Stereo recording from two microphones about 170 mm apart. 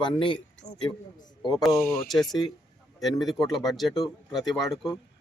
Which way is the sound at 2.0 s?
Centre (ahead or behind).